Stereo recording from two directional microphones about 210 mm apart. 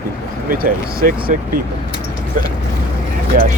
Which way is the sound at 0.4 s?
45° right (ahead or behind).